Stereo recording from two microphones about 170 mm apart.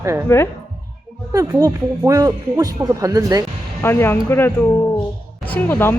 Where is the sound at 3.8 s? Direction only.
15° left (ahead or behind).